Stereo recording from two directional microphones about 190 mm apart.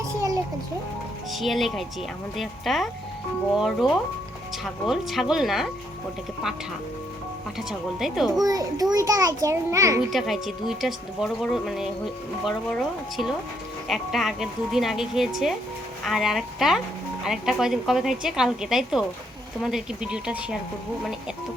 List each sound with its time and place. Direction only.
0.1 s a sound: 15° right (ahead or behind)
1.3 s a woman's voice: centre (ahead or behind)
7.7 s a woman's voice: centre (ahead or behind)
8.4 s a child's voice: 20° right (ahead or behind)
10.1 s a woman's voice: centre (ahead or behind)